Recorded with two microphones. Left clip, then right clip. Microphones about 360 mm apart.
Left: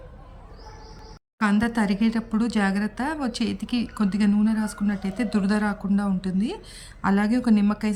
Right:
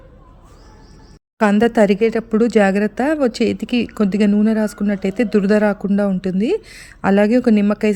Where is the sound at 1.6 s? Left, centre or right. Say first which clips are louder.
Right 12 dB; centre.